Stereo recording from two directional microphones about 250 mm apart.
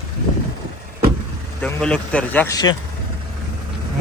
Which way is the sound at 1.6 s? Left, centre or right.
Centre.